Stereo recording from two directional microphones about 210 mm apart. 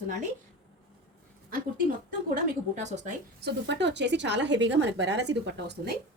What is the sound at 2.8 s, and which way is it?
Speech, 35° right (ahead or behind).